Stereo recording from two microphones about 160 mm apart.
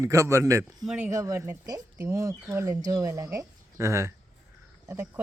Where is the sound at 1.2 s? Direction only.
15° right (ahead or behind).